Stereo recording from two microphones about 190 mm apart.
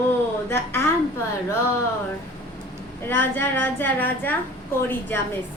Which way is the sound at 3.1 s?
10° left (ahead or behind).